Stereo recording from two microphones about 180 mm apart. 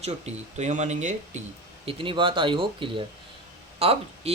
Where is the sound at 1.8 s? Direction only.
30° right (ahead or behind).